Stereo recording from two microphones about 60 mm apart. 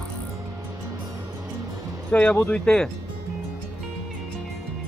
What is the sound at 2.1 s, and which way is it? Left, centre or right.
Speech, left.